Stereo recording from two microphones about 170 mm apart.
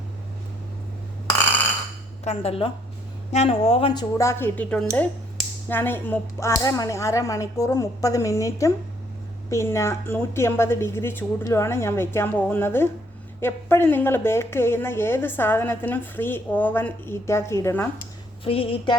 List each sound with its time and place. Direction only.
2.2 s speech: 35° left (ahead or behind)
4.2 s a woman's voice: 15° left (ahead or behind)
18.4 s speech: 35° left (ahead or behind)